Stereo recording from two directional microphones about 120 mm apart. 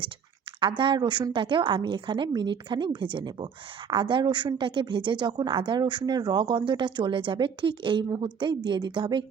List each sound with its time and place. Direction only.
0.6 s a woman's voice: 45° right (ahead or behind)